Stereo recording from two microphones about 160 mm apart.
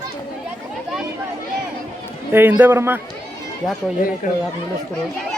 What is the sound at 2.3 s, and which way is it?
Speech, 10° right (ahead or behind).